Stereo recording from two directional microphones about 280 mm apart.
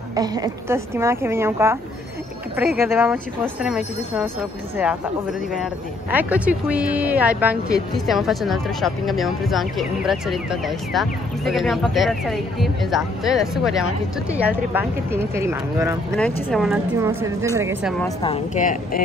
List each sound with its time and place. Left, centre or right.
0.1 s speech: centre
2.8 s speech: centre
5.6 s speech: centre
16.2 s speech: centre
18.2 s speech: left